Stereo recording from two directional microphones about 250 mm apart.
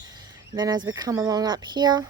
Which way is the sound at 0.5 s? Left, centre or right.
Centre.